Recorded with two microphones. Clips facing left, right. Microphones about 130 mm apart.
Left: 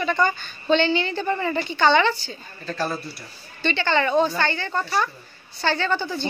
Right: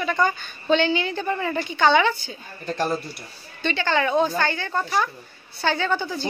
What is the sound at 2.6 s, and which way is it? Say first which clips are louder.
Speech: right 2 dB; 20° right (ahead or behind).